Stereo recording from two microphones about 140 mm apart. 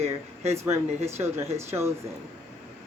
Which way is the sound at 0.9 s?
50° right (ahead or behind).